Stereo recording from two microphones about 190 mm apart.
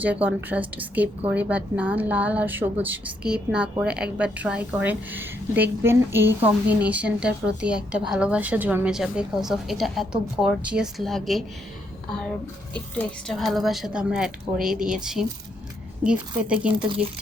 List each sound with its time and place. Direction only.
0.0 s a woman's voice: 10° right (ahead or behind)
13.0 s a woman's voice: 5° left (ahead or behind)
16.8 s speech: 25° right (ahead or behind)